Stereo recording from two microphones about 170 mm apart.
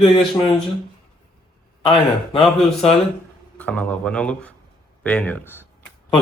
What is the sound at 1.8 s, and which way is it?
Speech, 35° left (ahead or behind).